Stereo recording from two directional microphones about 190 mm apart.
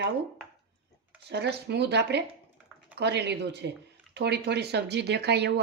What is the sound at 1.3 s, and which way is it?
Speech, 60° right (ahead or behind).